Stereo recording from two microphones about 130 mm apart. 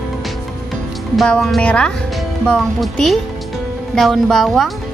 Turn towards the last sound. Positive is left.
turn(degrees=0)  # may be behind; listen again after turning